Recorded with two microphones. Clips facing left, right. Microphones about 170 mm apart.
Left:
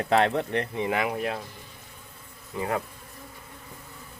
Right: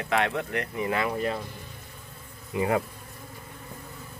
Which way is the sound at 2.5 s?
15° right (ahead or behind).